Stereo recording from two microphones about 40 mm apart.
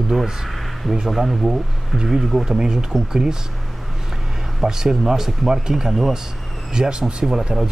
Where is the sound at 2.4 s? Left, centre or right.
Centre.